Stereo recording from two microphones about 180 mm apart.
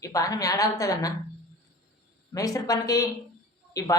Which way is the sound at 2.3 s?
20° left (ahead or behind).